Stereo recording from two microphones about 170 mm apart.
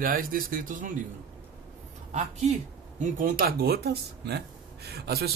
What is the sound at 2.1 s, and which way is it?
Speech, 45° right (ahead or behind).